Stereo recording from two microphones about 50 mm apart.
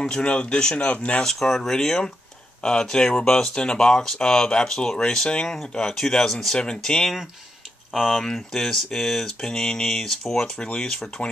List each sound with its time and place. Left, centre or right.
0.2 s speech: left
1.2 s speech: centre